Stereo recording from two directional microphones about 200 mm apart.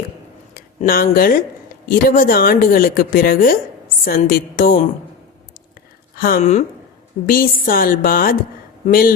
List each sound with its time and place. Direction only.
0.5 s a woman's voice: 45° left (ahead or behind)
6.1 s speech: 45° left (ahead or behind)
7.3 s a woman's voice: 45° left (ahead or behind)